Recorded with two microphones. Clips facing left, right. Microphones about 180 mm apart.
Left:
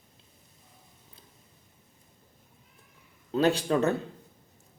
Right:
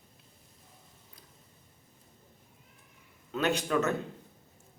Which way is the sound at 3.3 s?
30° left (ahead or behind).